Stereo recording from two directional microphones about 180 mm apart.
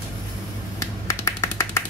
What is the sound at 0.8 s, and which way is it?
Tap, 15° left (ahead or behind).